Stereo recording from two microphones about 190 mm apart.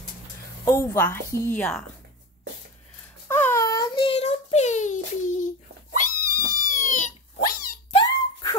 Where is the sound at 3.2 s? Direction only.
10° left (ahead or behind).